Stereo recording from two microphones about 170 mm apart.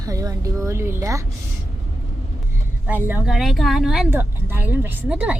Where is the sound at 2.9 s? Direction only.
10° right (ahead or behind).